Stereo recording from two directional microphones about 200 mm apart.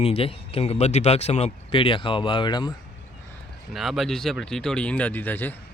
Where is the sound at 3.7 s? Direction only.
Centre (ahead or behind).